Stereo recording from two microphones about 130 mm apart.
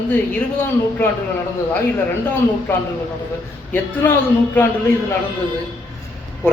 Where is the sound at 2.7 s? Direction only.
15° left (ahead or behind).